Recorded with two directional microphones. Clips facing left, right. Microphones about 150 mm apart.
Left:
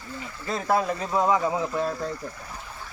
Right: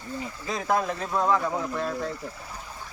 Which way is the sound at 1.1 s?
10° left (ahead or behind).